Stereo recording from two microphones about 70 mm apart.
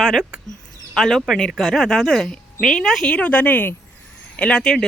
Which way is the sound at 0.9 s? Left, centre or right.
Centre.